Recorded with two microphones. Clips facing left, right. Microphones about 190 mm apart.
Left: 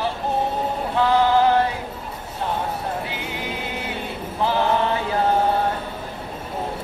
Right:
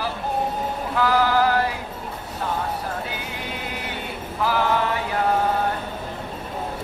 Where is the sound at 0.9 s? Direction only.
25° left (ahead or behind).